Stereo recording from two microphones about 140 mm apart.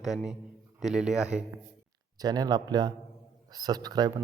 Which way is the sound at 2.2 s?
30° right (ahead or behind).